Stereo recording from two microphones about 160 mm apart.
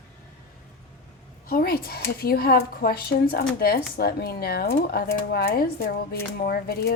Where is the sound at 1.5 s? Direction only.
70° left (ahead or behind).